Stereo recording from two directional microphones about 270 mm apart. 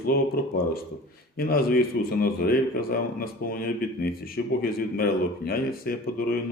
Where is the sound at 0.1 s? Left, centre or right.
Left.